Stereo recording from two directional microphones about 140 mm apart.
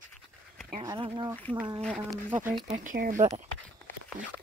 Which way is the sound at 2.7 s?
80° right.